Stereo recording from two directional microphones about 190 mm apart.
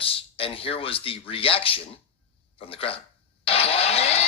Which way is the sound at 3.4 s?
30° left (ahead or behind).